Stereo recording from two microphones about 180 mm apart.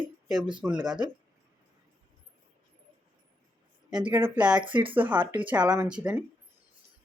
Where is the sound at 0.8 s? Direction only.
25° right (ahead or behind).